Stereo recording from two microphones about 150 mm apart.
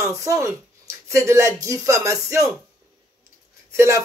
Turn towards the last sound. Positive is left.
turn(degrees=-20)  # may be behind; listen again after turning